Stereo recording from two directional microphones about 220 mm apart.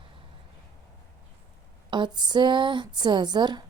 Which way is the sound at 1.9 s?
20° right (ahead or behind).